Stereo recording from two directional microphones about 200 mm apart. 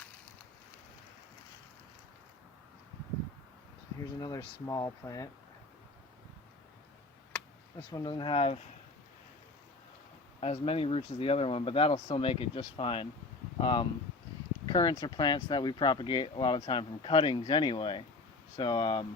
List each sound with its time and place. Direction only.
4.2 s speech: 20° left (ahead or behind)
7.9 s speech: 20° left (ahead or behind)
10.4 s speech: 30° left (ahead or behind)